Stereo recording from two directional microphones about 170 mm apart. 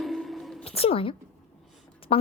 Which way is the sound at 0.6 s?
35° left (ahead or behind).